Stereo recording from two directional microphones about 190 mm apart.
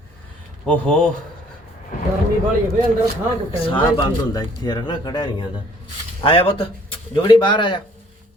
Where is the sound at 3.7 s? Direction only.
25° left (ahead or behind).